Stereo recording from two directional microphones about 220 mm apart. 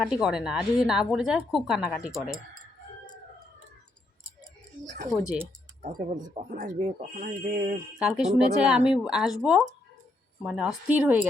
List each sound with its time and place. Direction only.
0.0 s a woman's voice: centre (ahead or behind)
5.1 s a woman's voice: 5° right (ahead or behind)
6.5 s speech: 35° right (ahead or behind)
7.9 s a woman's voice: 5° right (ahead or behind)